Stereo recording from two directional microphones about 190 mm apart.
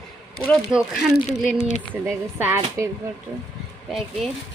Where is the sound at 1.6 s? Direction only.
35° left (ahead or behind).